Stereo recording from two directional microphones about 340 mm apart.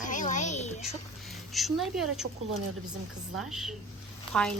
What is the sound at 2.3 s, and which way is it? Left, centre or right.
Speech, right.